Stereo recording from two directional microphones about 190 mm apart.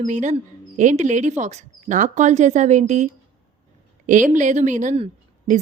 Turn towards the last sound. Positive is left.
turn(degrees=-35)  # may be behind; listen again after turning